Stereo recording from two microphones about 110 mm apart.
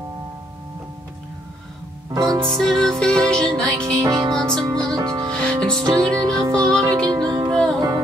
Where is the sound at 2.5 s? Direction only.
5° left (ahead or behind).